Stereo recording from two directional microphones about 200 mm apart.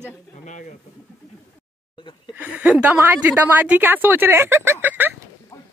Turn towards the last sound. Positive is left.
turn(degrees=-10)  # may be behind; listen again after turning